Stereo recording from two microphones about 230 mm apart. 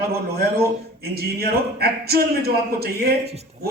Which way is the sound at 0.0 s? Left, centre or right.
Right.